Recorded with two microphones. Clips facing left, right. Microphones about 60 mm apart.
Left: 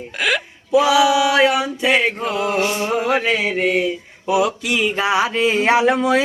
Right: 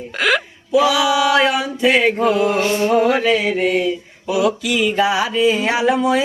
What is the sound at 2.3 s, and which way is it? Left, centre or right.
Male singing, centre.